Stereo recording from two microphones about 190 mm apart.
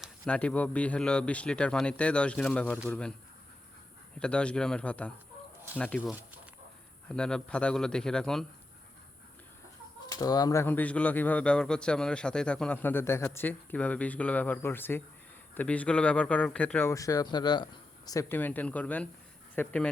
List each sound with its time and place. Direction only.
0.0 s a man's voice: 5° left (ahead or behind)
4.2 s a man's voice: 5° left (ahead or behind)
7.1 s a man's voice: 5° left (ahead or behind)
10.1 s speech: 20° left (ahead or behind)